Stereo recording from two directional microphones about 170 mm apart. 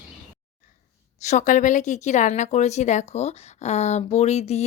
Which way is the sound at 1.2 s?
45° left (ahead or behind).